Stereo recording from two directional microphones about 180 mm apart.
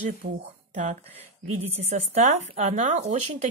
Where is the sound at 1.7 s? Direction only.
35° right (ahead or behind).